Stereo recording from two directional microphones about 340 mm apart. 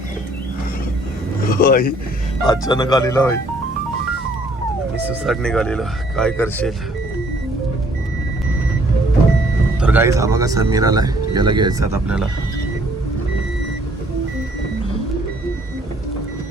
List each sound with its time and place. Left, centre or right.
1.5 s a sound: left
2.5 s speech: centre
5.0 s speech: centre
9.8 s speech: centre